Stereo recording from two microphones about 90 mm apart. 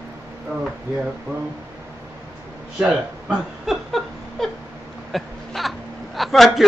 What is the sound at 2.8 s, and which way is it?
Speech, 5° right (ahead or behind).